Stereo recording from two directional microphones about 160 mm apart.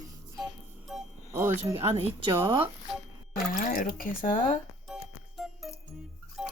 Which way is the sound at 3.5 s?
60° left (ahead or behind).